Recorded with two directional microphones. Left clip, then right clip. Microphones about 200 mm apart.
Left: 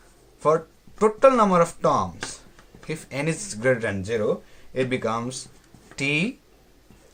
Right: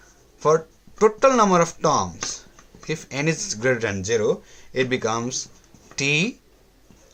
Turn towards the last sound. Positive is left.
turn(degrees=-30)  # may be behind; listen again after turning